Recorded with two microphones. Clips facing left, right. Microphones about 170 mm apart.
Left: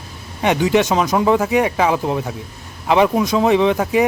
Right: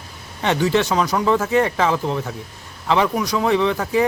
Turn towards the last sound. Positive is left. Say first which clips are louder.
# left 3 dB
turn(degrees=20)  # may be behind; listen again after turning